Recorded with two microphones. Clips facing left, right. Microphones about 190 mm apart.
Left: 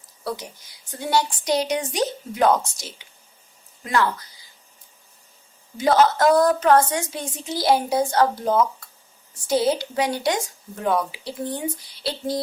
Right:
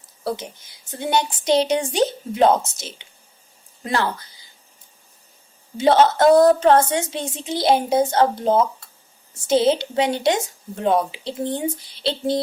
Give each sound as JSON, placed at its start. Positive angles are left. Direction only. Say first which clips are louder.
{"t": 0.3, "sound": "a woman's voice", "louder": "right 3 dB", "side_deg": -25}
{"t": 5.7, "sound": "a woman's voice", "louder": "right 2 dB", "side_deg": -25}